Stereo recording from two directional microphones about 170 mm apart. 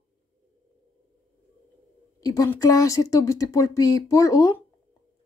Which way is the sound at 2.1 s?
20° left (ahead or behind).